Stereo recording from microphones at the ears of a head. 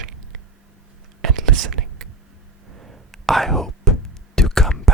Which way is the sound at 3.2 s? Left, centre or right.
Centre.